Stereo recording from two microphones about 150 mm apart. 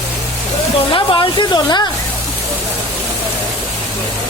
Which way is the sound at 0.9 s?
35° left (ahead or behind).